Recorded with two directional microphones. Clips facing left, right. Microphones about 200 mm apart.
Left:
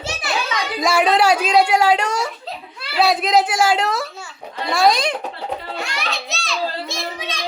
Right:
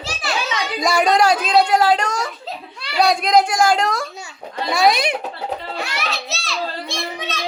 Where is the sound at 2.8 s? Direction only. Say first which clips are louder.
Even; 5° left (ahead or behind).